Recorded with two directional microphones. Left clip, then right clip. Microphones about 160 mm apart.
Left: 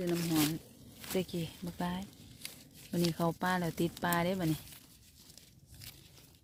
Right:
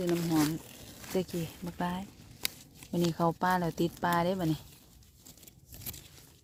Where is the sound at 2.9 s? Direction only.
5° right (ahead or behind).